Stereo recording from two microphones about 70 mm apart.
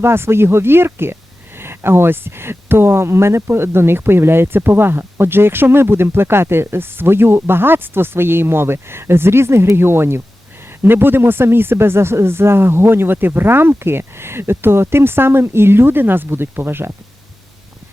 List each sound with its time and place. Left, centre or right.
0.0 s speech: right